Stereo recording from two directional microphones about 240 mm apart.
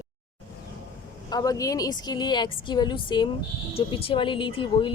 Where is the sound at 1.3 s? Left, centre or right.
Centre.